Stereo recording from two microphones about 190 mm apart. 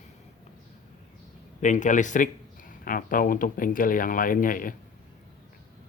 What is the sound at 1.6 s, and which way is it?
Speech, 40° left (ahead or behind).